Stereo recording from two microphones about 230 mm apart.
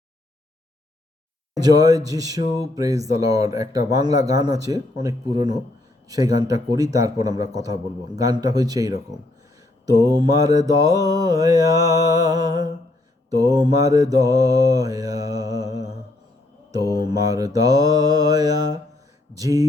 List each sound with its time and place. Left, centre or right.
1.6 s mantra: centre